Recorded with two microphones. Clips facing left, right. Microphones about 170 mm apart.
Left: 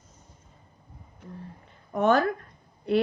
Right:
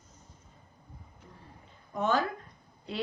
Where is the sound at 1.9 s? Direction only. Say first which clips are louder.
Left 7 dB; 60° left (ahead or behind).